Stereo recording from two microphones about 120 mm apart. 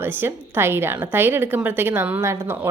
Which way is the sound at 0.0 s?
20° right (ahead or behind).